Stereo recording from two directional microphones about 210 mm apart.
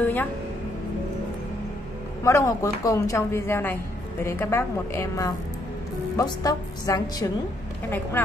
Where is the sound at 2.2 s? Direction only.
15° left (ahead or behind).